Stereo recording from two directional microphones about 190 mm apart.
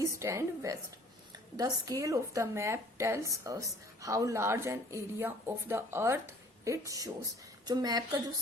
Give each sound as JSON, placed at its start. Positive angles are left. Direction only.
{"t": 0.0, "sound": "a woman's voice", "side_deg": -15}